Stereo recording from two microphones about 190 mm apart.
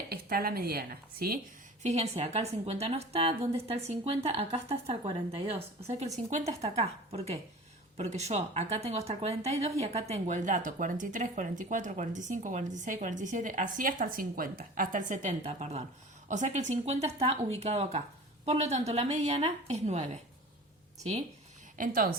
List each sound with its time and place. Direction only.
0.1 s speech: 55° right (ahead or behind)
1.8 s speech: 35° right (ahead or behind)
7.9 s speech: 35° right (ahead or behind)
21.8 s speech: 45° right (ahead or behind)